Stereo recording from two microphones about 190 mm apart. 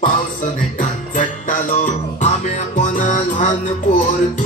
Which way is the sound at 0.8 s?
45° left (ahead or behind).